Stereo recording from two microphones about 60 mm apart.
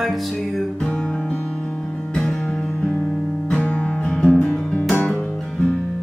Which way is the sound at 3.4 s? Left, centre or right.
Centre.